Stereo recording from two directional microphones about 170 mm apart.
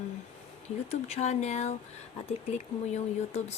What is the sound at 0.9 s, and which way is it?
Speech, 40° left (ahead or behind).